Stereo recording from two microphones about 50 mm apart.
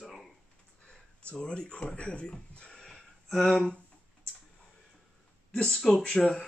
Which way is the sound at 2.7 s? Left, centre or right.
Centre.